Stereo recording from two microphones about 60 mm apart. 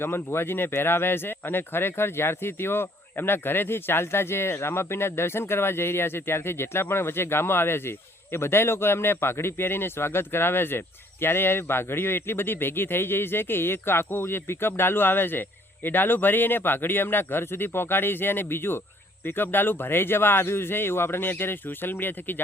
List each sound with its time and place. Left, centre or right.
0.0 s speech: left